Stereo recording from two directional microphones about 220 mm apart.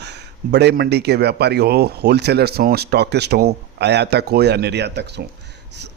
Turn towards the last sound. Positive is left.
turn(degrees=-50)  # may be behind; listen again after turning